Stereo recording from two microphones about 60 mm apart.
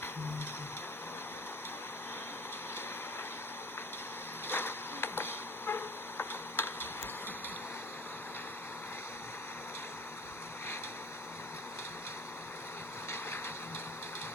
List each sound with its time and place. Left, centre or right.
4.4 s insect: left